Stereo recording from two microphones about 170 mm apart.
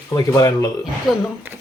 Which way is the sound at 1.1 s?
Centre (ahead or behind).